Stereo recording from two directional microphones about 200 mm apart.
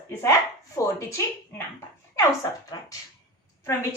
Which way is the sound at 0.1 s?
15° left (ahead or behind).